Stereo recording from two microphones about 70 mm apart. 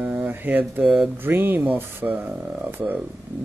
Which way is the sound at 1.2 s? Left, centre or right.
Right.